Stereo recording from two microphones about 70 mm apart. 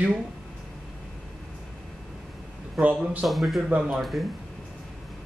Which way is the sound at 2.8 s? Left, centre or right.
Right.